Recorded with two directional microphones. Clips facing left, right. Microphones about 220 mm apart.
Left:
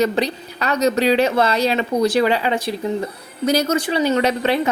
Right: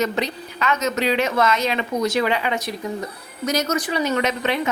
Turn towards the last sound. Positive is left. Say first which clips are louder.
# left 4 dB
turn(degrees=35)  # may be behind; listen again after turning